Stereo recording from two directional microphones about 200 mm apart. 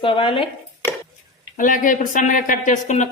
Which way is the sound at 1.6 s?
40° left (ahead or behind).